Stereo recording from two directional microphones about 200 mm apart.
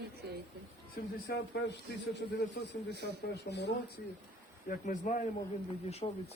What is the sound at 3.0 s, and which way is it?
Speech, 55° left (ahead or behind).